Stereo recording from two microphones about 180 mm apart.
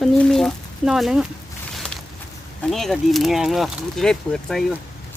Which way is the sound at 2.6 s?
Centre (ahead or behind).